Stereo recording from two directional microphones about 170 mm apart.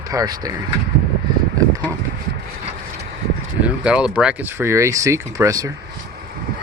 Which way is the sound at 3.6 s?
5° right (ahead or behind).